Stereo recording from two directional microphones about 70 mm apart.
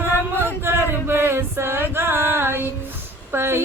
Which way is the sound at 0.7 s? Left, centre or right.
Right.